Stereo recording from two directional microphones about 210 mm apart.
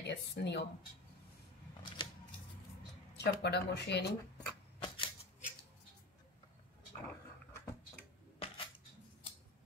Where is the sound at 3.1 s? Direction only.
55° left (ahead or behind).